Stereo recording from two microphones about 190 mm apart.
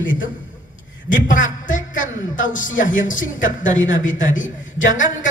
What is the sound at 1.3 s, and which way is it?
A man's voice, 45° left (ahead or behind).